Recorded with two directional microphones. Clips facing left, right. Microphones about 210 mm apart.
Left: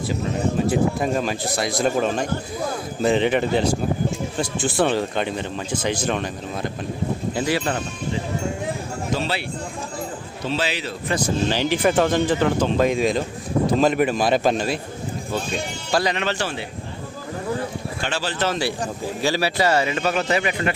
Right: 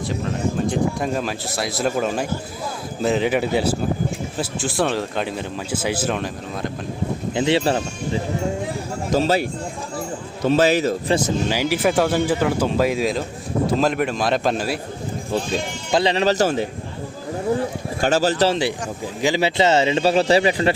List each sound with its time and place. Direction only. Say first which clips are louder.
0.7 s speech: left 1 dB; centre (ahead or behind)
7.3 s a man's voice: right 6 dB; 25° right (ahead or behind)
9.1 s speech: right 9 dB; 40° right (ahead or behind)
11.4 s speech: even; 10° right (ahead or behind)
15.3 s a man's voice: right 4 dB; 25° right (ahead or behind)
16.1 s speech: right 7 dB; 40° right (ahead or behind)
18.0 s speech: right 8 dB; 40° right (ahead or behind)
19.2 s a man's voice: right 3 dB; 20° right (ahead or behind)